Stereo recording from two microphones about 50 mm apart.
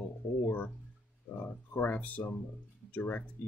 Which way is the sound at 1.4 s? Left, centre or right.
Left.